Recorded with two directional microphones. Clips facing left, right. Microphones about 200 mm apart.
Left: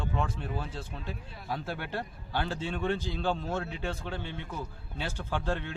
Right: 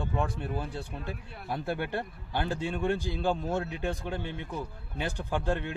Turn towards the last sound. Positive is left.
turn(degrees=-15)  # may be behind; listen again after turning